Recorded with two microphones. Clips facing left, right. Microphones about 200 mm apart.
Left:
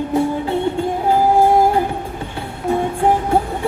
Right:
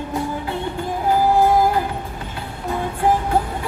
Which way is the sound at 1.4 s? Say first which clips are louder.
Left 3 dB; 25° left (ahead or behind).